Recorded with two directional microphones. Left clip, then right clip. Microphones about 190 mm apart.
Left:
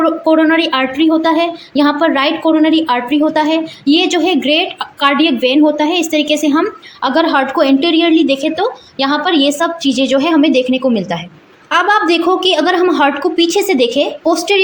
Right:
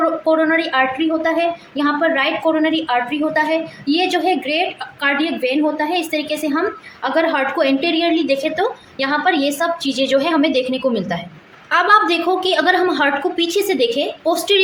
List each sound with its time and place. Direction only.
0.0 s a woman's voice: 35° left (ahead or behind)